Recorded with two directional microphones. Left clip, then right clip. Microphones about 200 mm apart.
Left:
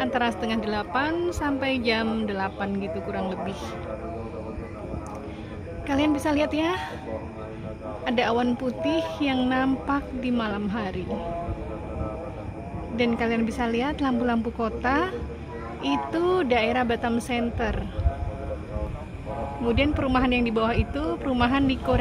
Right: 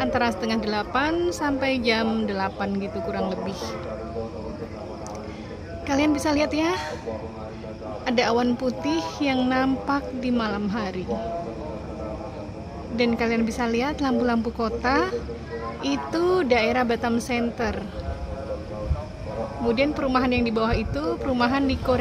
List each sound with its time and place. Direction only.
0.0 s a woman's voice: 5° right (ahead or behind)
5.9 s a woman's voice: 5° right (ahead or behind)
8.0 s a woman's voice: 5° right (ahead or behind)
12.9 s a woman's voice: centre (ahead or behind)
19.7 s a woman's voice: centre (ahead or behind)